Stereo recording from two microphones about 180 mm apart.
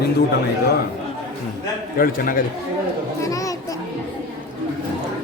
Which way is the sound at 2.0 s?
50° left (ahead or behind).